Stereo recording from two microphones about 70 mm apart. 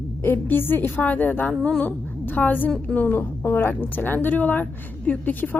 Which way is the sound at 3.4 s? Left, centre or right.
Left.